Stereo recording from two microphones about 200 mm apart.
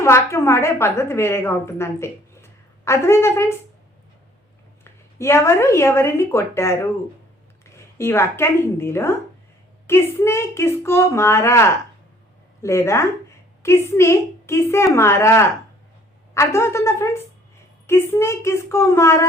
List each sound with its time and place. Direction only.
0.0 s a woman's voice: 15° left (ahead or behind)
4.8 s a woman's voice: 15° left (ahead or behind)